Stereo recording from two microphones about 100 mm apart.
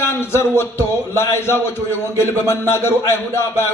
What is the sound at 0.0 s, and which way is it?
A man's voice, 25° left (ahead or behind).